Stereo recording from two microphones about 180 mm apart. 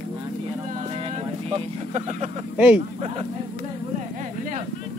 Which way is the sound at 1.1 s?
35° right (ahead or behind).